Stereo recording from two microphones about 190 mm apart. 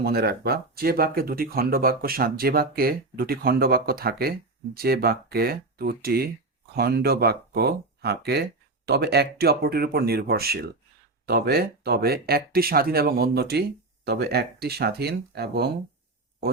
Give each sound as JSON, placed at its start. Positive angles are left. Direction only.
{"t": 0.0, "sound": "speech", "side_deg": -55}